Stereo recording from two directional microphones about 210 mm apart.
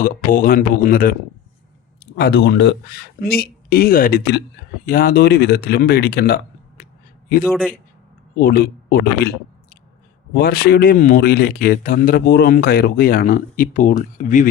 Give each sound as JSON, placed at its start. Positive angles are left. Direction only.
{"t": 0.0, "sound": "speech", "side_deg": 40}
{"t": 2.1, "sound": "speech", "side_deg": 50}
{"t": 7.4, "sound": "a man's voice", "side_deg": 0}
{"t": 8.4, "sound": "speech", "side_deg": 45}
{"t": 10.3, "sound": "speech", "side_deg": 45}